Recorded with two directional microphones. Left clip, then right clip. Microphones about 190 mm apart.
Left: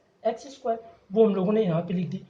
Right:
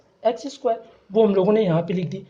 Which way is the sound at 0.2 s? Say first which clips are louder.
Right 6 dB; 40° right (ahead or behind).